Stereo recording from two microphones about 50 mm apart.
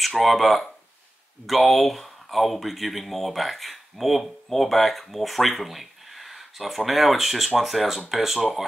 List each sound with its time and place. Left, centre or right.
0.1 s speech: centre